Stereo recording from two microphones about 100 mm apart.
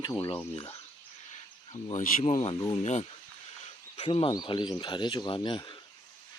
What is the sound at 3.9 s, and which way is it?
Speech, 75° left (ahead or behind).